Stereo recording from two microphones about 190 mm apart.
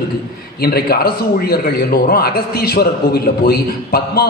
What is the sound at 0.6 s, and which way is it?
A man's voice, 55° left (ahead or behind).